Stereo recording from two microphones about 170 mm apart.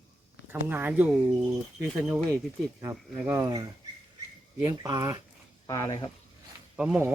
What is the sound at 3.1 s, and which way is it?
Speech, 10° right (ahead or behind).